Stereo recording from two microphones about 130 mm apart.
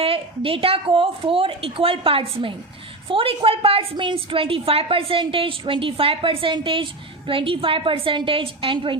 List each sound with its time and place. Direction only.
0.0 s a woman's voice: 45° right (ahead or behind)